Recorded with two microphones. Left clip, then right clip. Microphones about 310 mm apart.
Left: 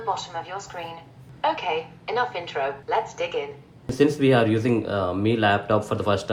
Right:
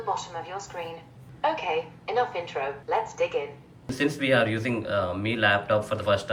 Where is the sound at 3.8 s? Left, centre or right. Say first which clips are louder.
Left 5 dB; centre.